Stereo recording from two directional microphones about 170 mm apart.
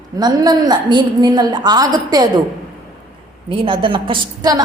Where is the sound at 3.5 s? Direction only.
30° right (ahead or behind).